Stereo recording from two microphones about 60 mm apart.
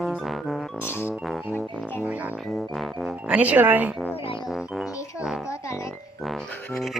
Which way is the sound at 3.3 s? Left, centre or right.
Right.